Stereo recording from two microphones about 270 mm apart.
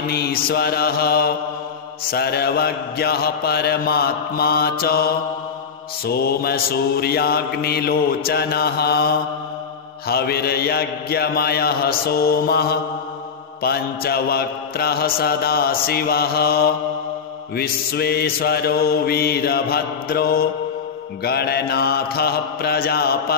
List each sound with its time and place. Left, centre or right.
0.1 s mantra: left